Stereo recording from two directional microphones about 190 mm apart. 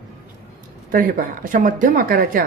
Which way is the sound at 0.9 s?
45° right (ahead or behind).